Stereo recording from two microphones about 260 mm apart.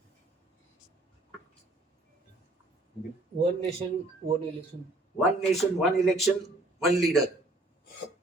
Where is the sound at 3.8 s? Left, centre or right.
Right.